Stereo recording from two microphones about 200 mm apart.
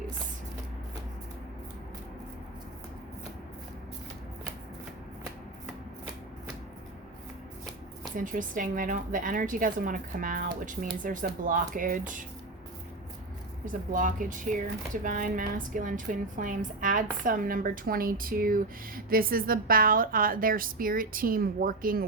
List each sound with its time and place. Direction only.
8.1 s a woman's voice: 40° right (ahead or behind)
13.9 s a woman's voice: 40° right (ahead or behind)